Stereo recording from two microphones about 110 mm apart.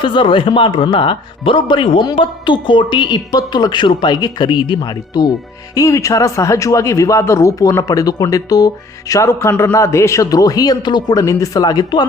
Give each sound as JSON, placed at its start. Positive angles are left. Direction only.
{"t": 0.0, "sound": "speech", "side_deg": 50}